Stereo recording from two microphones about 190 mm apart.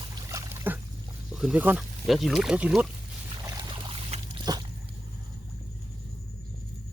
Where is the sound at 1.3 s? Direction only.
5° right (ahead or behind).